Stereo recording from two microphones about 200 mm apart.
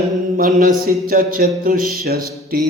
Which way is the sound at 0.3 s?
40° right (ahead or behind).